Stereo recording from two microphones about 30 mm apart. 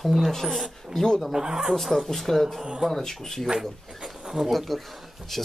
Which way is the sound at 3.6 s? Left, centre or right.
Centre.